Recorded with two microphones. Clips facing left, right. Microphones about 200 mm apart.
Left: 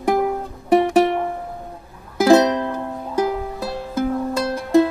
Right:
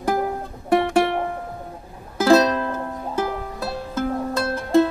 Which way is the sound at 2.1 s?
15° left (ahead or behind).